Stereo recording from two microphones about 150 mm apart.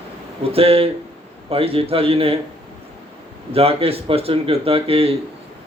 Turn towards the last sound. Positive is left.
turn(degrees=-40)  # may be behind; listen again after turning